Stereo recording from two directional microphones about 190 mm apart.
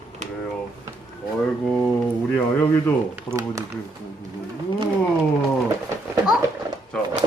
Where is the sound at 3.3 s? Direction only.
15° right (ahead or behind).